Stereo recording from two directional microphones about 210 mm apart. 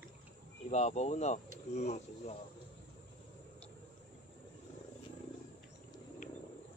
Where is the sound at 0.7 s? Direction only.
30° left (ahead or behind).